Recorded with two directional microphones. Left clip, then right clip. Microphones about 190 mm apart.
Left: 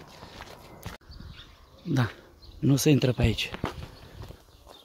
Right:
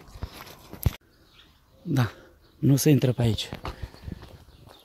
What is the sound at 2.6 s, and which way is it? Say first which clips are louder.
Speech: right 1 dB; 30° right (ahead or behind).